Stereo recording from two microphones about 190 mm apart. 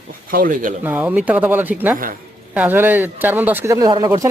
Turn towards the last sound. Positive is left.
turn(degrees=-20)  # may be behind; listen again after turning